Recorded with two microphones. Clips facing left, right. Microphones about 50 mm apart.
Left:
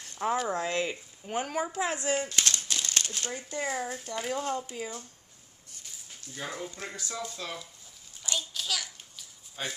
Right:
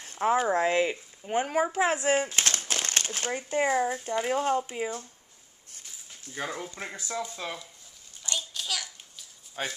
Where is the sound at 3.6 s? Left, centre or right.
Centre.